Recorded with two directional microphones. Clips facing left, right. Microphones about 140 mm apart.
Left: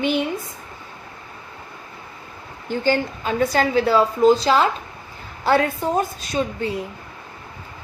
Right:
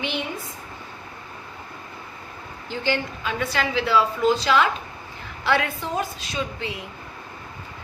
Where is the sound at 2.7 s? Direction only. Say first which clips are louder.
Left 5 dB; 40° left (ahead or behind).